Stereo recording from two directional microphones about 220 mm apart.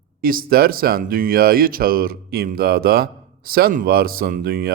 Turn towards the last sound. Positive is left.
turn(degrees=-45)  # may be behind; listen again after turning